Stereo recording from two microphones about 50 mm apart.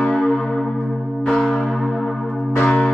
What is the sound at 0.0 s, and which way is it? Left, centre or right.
Church bell, centre.